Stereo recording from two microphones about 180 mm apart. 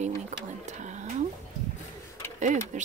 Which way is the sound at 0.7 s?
40° right (ahead or behind).